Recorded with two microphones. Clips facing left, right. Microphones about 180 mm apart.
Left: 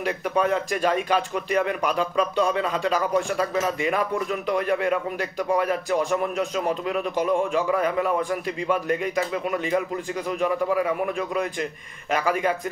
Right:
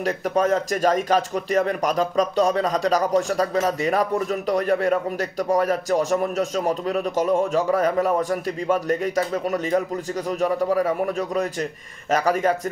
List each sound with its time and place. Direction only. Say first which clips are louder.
0.0 s speech: right 2 dB; 40° right (ahead or behind)